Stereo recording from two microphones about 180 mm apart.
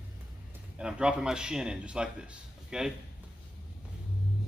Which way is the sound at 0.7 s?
5° right (ahead or behind).